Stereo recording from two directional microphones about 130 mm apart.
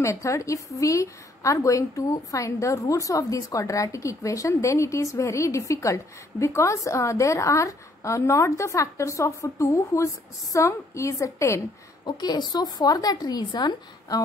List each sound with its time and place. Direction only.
0.0 s a woman's voice: 20° left (ahead or behind)